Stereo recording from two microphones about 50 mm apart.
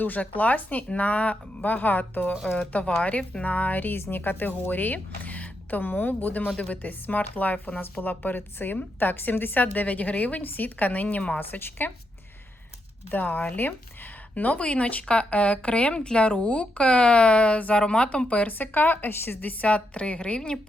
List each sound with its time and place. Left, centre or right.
0.0 s a woman's voice: left
3.0 s a woman's voice: left
11.3 s a woman's voice: left
13.1 s a woman's voice: left
18.4 s a woman's voice: left